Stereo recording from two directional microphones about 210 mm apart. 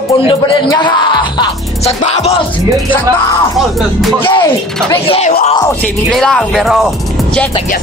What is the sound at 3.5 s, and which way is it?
Music, centre (ahead or behind).